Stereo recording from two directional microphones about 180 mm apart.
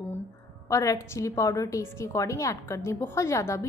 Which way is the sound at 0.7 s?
15° left (ahead or behind).